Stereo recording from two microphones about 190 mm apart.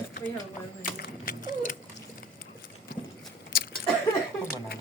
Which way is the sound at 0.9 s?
50° left (ahead or behind).